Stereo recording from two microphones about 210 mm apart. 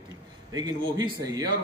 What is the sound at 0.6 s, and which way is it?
Speech, 20° right (ahead or behind).